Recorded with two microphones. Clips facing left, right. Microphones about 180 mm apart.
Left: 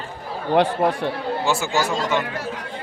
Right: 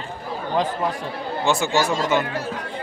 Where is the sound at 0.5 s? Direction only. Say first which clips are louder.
Left 5 dB; 70° left (ahead or behind).